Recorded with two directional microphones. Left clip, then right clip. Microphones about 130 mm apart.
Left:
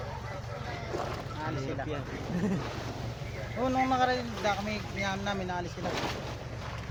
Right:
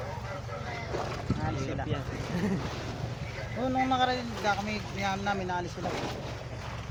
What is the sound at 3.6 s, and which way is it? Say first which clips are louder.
Speech: even; 25° right (ahead or behind).